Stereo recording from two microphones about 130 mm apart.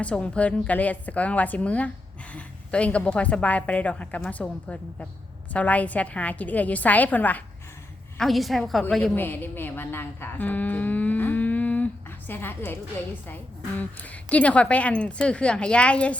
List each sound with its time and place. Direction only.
0.0 s a woman's voice: 10° left (ahead or behind)
8.2 s a woman's voice: centre (ahead or behind)
9.1 s a woman's voice: 15° left (ahead or behind)